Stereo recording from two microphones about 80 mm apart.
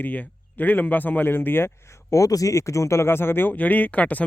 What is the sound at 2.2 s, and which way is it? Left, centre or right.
A man's voice, left.